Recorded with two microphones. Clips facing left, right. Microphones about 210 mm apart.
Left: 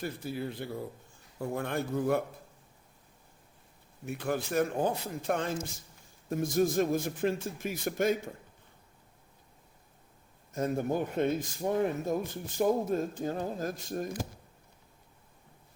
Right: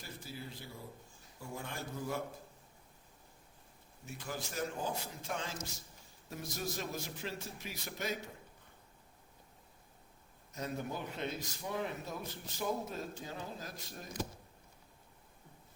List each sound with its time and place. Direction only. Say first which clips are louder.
0.0 s a man's voice: left 12 dB; 60° left (ahead or behind)
4.0 s a man's voice: left 11 dB; 60° left (ahead or behind)
10.5 s a man's voice: left 10 dB; 50° left (ahead or behind)